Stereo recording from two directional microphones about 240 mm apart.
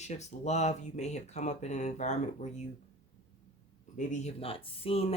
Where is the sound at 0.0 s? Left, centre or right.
Left.